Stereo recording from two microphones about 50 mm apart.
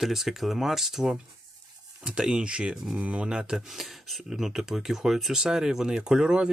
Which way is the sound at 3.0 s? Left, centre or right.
Right.